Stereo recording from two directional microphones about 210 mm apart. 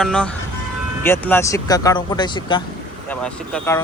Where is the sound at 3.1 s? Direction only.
5° left (ahead or behind).